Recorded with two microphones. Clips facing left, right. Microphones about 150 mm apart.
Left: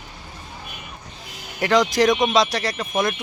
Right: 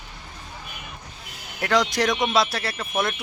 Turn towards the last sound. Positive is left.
turn(degrees=0)  # may be behind; listen again after turning